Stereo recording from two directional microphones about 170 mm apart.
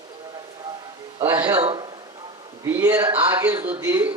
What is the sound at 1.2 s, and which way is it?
Speech, 20° right (ahead or behind).